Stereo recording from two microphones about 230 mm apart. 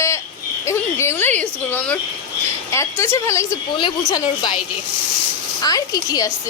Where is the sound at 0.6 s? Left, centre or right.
Centre.